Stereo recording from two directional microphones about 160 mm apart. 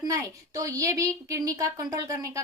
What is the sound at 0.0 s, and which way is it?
A woman's voice, 20° right (ahead or behind).